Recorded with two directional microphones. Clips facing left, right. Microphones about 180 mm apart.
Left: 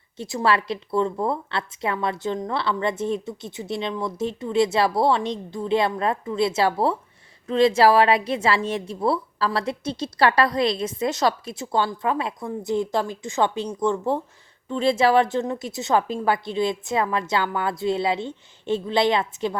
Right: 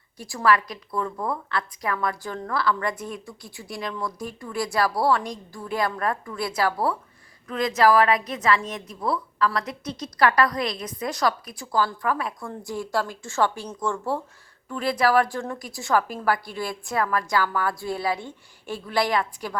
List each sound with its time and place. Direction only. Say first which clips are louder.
0.2 s a woman's voice: even; 20° left (ahead or behind)